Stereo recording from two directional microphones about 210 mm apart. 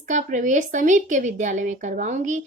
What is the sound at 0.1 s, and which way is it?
Speech, 35° right (ahead or behind).